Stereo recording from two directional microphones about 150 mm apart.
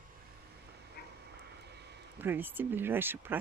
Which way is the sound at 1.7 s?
90° right.